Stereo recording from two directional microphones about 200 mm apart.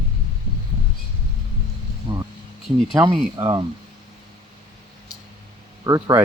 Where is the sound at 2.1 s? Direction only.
25° right (ahead or behind).